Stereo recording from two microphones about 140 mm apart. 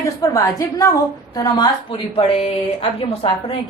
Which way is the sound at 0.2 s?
25° left (ahead or behind).